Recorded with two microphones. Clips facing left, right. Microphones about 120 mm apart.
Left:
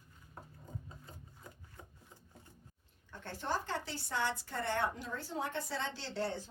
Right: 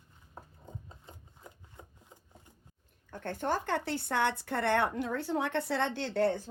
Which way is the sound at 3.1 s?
50° right (ahead or behind).